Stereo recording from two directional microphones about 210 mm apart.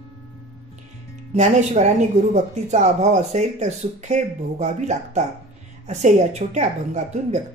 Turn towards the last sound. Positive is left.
turn(degrees=-35)  # may be behind; listen again after turning